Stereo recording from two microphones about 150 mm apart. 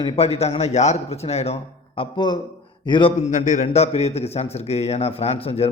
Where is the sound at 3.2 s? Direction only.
55° left (ahead or behind).